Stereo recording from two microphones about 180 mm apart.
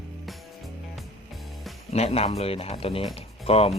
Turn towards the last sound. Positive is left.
turn(degrees=35)  # may be behind; listen again after turning